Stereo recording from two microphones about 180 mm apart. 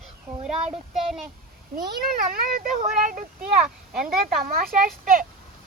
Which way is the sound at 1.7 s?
55° right (ahead or behind).